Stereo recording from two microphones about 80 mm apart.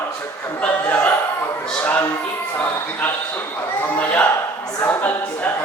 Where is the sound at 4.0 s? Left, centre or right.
Centre.